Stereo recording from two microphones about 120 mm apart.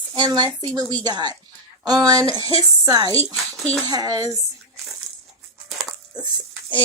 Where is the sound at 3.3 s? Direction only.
10° left (ahead or behind).